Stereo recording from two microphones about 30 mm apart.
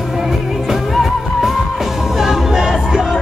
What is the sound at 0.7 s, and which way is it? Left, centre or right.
Music, centre.